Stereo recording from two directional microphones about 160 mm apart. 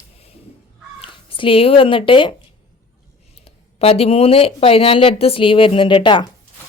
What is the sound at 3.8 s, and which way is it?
Speech, 35° left (ahead or behind).